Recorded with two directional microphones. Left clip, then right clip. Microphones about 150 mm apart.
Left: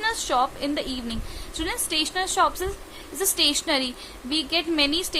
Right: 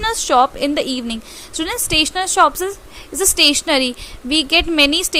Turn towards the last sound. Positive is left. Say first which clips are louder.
# right 9 dB
turn(degrees=-45)  # may be behind; listen again after turning